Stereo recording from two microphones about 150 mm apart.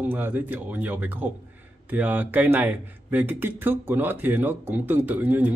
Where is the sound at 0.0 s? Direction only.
10° right (ahead or behind).